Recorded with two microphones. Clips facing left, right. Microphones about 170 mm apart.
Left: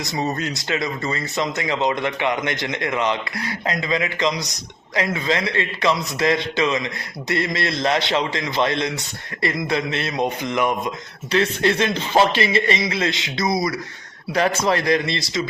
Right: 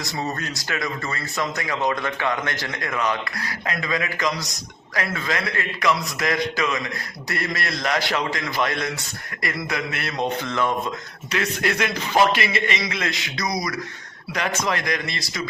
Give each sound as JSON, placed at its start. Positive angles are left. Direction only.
{"t": 0.0, "sound": "speech", "side_deg": 20}
{"t": 11.3, "sound": "a man's voice", "side_deg": 30}